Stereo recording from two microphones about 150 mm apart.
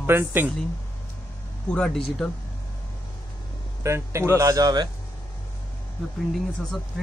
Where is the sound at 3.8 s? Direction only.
20° right (ahead or behind).